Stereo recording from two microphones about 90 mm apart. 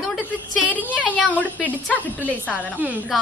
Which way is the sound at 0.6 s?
20° left (ahead or behind).